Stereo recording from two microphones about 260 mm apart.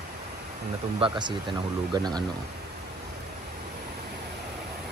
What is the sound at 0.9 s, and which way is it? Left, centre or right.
Speech, centre.